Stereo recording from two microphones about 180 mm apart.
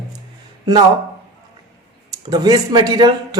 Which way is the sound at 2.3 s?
20° right (ahead or behind).